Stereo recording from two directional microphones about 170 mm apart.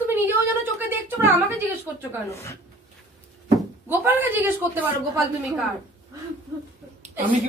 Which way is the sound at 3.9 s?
10° right (ahead or behind).